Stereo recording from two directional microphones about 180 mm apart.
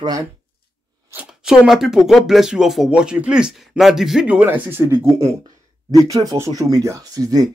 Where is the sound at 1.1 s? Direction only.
5° right (ahead or behind).